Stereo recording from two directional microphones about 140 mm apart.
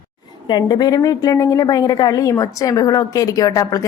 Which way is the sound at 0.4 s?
30° left (ahead or behind).